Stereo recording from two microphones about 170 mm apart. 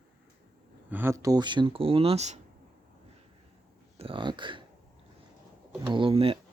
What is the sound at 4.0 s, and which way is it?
Speech, 30° right (ahead or behind).